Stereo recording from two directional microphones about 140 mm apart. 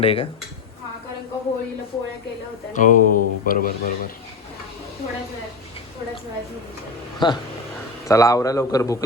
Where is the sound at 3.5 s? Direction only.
90° left.